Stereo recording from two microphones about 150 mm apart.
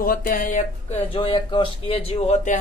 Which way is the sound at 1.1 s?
40° left (ahead or behind).